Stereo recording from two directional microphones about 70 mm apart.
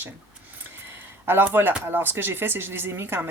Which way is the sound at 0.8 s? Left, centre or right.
Right.